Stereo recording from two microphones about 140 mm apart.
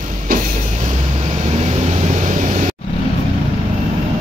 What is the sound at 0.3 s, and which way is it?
Vehicle, 65° right (ahead or behind).